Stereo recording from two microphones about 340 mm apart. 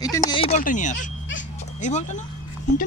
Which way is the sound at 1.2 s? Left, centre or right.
Left.